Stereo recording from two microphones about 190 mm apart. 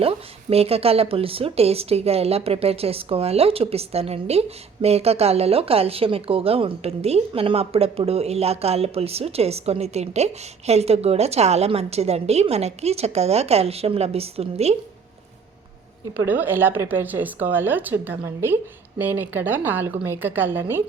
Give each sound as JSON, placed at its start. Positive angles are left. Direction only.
{"t": 0.0, "sound": "speech", "side_deg": -30}
{"t": 16.1, "sound": "speech", "side_deg": -10}